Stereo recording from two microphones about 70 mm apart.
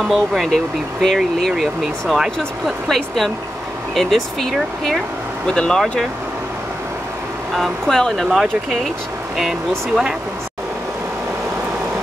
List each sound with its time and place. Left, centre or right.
0.0 s speech: centre
7.5 s speech: centre